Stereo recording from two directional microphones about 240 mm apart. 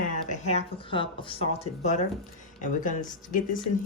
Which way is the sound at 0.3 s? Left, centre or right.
Left.